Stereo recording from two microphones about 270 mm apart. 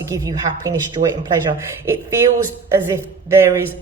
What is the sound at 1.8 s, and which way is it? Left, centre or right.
A woman's voice, centre.